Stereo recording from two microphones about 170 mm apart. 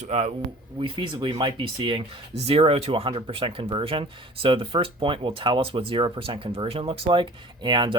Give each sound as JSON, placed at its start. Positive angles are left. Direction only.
{"t": 0.0, "sound": "speech", "side_deg": -40}
{"t": 0.8, "sound": "speech", "side_deg": -30}